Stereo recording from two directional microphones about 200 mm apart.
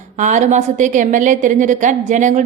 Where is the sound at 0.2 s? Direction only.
35° right (ahead or behind).